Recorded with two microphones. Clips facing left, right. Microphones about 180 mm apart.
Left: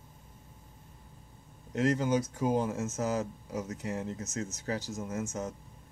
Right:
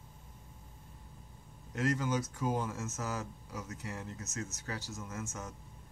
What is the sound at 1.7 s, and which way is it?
Speech, 40° left (ahead or behind).